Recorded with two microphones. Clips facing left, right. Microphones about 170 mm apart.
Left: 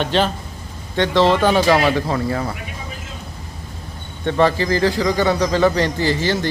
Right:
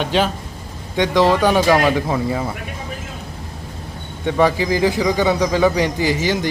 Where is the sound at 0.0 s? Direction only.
10° right (ahead or behind).